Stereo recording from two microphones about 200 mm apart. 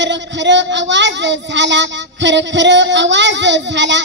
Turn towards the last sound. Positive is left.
turn(degrees=-65)  # may be behind; listen again after turning